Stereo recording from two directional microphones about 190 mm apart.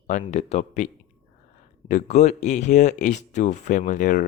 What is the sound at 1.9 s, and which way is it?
Speech, 40° left (ahead or behind).